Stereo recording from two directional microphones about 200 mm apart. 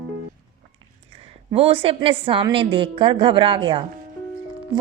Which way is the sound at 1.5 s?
30° right (ahead or behind).